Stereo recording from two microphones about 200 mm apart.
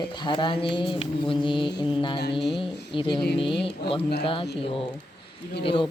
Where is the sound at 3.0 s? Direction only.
25° left (ahead or behind).